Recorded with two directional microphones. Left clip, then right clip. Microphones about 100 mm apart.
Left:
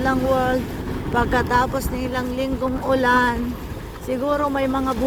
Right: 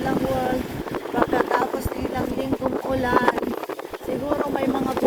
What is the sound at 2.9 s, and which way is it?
Speech, 35° left (ahead or behind).